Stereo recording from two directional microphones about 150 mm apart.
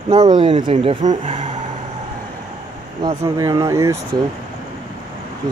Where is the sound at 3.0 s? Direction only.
25° right (ahead or behind).